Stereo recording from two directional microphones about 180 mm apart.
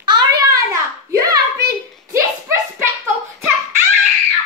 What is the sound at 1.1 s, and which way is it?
Hands, 20° right (ahead or behind).